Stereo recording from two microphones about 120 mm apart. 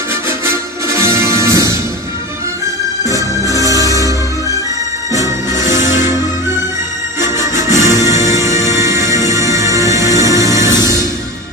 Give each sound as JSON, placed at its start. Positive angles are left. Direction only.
{"t": 0.1, "sound": "music", "side_deg": -20}
{"t": 3.6, "sound": "music", "side_deg": -30}
{"t": 5.1, "sound": "music", "side_deg": -25}
{"t": 7.2, "sound": "music", "side_deg": -25}